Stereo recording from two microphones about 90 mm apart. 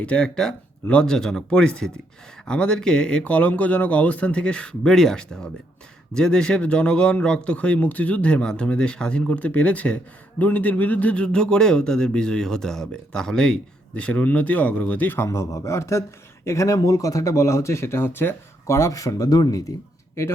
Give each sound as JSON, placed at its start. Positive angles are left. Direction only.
{"t": 0.0, "sound": "speech", "side_deg": 10}
{"t": 15.3, "sound": "speech", "side_deg": 35}